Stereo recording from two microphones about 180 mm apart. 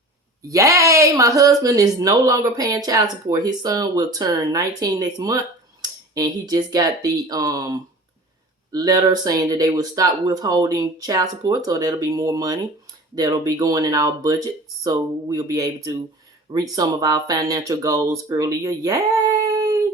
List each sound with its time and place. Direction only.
0.4 s speech: 15° right (ahead or behind)